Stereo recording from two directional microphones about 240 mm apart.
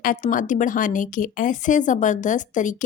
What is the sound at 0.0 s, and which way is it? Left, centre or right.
A woman's voice, left.